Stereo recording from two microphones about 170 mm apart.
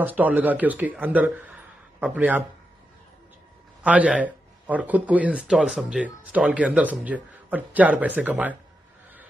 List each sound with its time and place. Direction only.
0.0 s a man's voice: 10° right (ahead or behind)
3.8 s speech: 5° right (ahead or behind)